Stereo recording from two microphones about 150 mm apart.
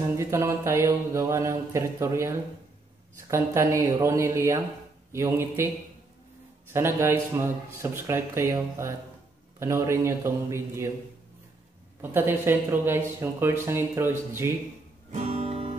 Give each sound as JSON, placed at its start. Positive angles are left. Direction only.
{"t": 0.2, "sound": "speech", "side_deg": -15}
{"t": 6.7, "sound": "speech", "side_deg": -15}
{"t": 12.0, "sound": "speech", "side_deg": -15}
{"t": 15.0, "sound": "music", "side_deg": -50}